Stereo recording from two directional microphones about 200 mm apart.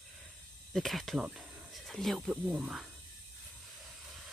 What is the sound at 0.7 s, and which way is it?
Speech, centre (ahead or behind).